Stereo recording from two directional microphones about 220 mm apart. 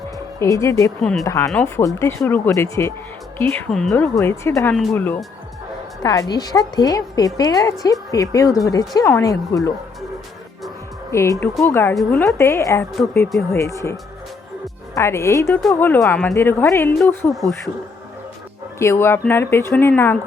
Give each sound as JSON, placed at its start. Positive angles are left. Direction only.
{"t": 0.3, "sound": "speech", "side_deg": 15}
{"t": 11.1, "sound": "speech", "side_deg": 10}
{"t": 14.9, "sound": "speech", "side_deg": 15}
{"t": 18.8, "sound": "speech", "side_deg": 10}